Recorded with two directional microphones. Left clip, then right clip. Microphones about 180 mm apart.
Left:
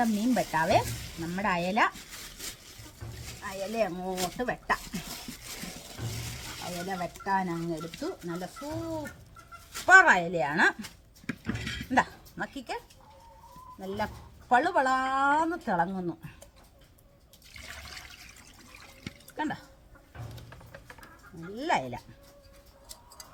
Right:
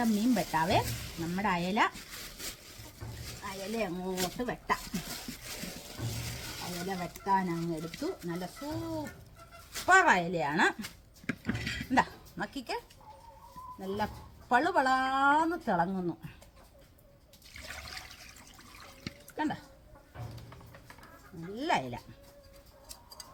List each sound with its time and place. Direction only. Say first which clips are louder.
0.0 s stir: left 2 dB; centre (ahead or behind)
0.3 s speech: left 5 dB; 10° right (ahead or behind)
2.1 s a sound: left 1 dB; 5° left (ahead or behind)
3.4 s speech: left 5 dB; 5° right (ahead or behind)
4.9 s dog: even; centre (ahead or behind)
6.7 s speech: left 4 dB; centre (ahead or behind)
9.8 s speech: left 5 dB; 20° right (ahead or behind)
10.8 s a sound: right 1 dB; 10° left (ahead or behind)
11.9 s speech: left 2 dB; 15° right (ahead or behind)
13.8 s speech: left 1 dB; 15° right (ahead or behind)
19.4 s speech: left 1 dB; 15° right (ahead or behind)
21.5 s speech: left 2 dB; 15° right (ahead or behind)